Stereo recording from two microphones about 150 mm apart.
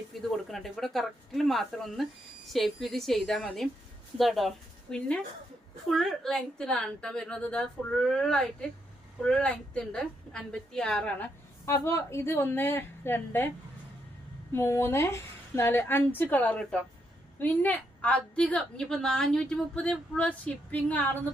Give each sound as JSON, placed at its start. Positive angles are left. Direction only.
{"t": 0.1, "sound": "a woman's voice", "side_deg": 0}
{"t": 11.6, "sound": "a woman's voice", "side_deg": 20}
{"t": 14.5, "sound": "a woman's voice", "side_deg": 15}